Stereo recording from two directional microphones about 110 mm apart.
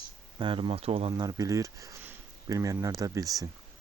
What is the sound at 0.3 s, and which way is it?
Speech, 50° right (ahead or behind).